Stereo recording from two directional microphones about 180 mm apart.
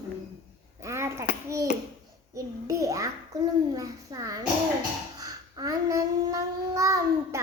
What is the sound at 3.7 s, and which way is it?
Speech, 20° right (ahead or behind).